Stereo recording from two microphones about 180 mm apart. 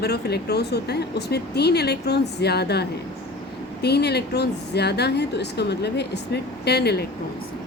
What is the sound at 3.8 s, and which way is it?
Speech, 65° left (ahead or behind).